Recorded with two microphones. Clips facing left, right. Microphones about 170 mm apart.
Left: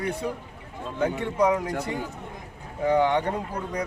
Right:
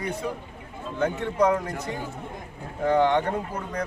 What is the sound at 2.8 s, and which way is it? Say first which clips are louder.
Speech: right 1 dB; 10° left (ahead or behind).